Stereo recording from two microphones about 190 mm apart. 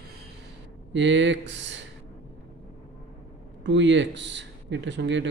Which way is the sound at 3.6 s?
70° right (ahead or behind).